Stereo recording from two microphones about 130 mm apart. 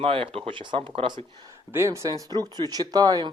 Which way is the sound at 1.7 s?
20° right (ahead or behind).